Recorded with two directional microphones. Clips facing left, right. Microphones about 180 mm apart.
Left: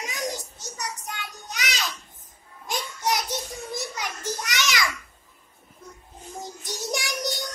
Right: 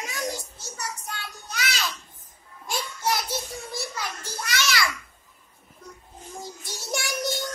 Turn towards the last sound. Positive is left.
turn(degrees=15)  # may be behind; listen again after turning